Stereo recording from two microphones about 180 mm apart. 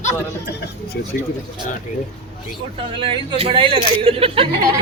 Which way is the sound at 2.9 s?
30° right (ahead or behind).